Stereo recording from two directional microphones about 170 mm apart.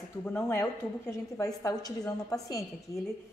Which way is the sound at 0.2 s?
15° left (ahead or behind).